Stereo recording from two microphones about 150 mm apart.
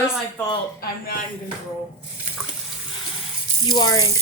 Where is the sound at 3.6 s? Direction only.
25° left (ahead or behind).